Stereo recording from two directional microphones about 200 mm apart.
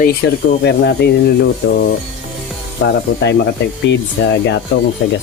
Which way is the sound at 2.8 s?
55° left (ahead or behind).